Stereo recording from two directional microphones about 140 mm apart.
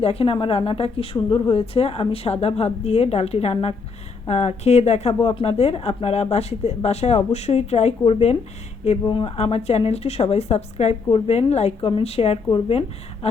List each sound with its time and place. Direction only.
0.0 s a woman's voice: 45° left (ahead or behind)
9.0 s a woman's voice: 40° left (ahead or behind)